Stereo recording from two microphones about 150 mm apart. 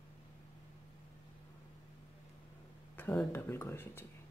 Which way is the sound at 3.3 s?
15° left (ahead or behind).